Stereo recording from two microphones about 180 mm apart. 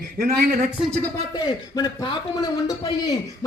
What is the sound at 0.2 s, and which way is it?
Speech, 55° right (ahead or behind).